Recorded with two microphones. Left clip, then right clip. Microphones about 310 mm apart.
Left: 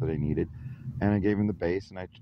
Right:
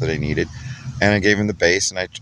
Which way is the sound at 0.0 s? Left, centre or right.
Left.